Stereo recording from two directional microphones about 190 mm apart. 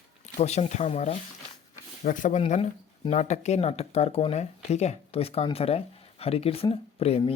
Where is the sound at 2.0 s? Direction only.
45° left (ahead or behind).